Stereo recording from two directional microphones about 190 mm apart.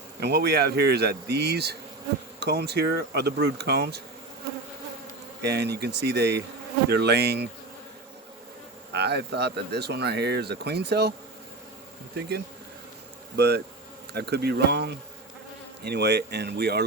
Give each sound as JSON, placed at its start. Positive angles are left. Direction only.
{"t": 0.2, "sound": "speech", "side_deg": -55}
{"t": 5.4, "sound": "speech", "side_deg": -60}
{"t": 8.9, "sound": "speech", "side_deg": -60}
{"t": 13.3, "sound": "speech", "side_deg": -60}